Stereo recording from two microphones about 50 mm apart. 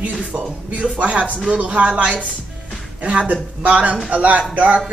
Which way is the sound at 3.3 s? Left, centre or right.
Right.